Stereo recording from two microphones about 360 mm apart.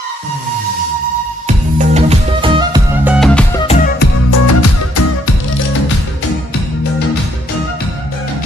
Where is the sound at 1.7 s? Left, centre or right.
Centre.